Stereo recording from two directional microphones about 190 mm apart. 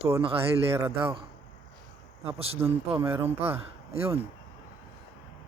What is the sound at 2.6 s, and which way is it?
Speech, 15° right (ahead or behind).